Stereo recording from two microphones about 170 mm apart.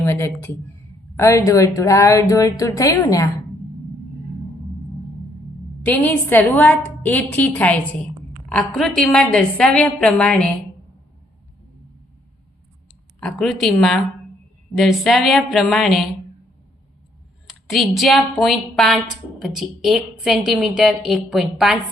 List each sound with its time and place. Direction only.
0.0 s a woman's voice: 15° left (ahead or behind)
5.8 s a woman's voice: 10° left (ahead or behind)
13.1 s speech: 5° left (ahead or behind)
14.8 s speech: centre (ahead or behind)
17.4 s speech: centre (ahead or behind)